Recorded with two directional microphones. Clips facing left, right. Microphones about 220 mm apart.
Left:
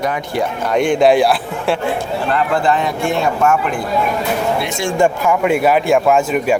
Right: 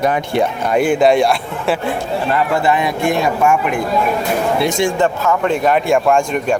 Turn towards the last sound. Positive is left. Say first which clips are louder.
# left 1 dB
turn(degrees=5)  # may be behind; listen again after turning